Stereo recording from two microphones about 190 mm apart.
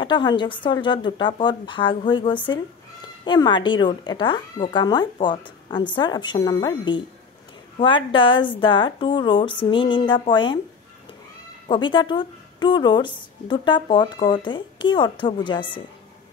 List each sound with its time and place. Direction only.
0.0 s a woman's voice: 25° left (ahead or behind)
11.7 s a woman's voice: 25° left (ahead or behind)